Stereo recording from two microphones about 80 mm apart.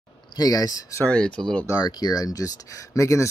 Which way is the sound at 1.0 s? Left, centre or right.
Centre.